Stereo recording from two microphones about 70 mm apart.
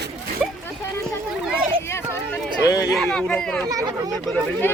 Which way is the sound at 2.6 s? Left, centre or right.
Left.